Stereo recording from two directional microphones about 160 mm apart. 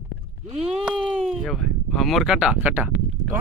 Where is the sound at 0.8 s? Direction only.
Centre (ahead or behind).